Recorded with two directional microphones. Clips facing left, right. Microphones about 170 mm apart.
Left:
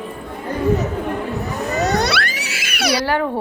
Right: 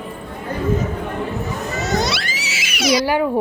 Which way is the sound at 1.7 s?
65° left (ahead or behind).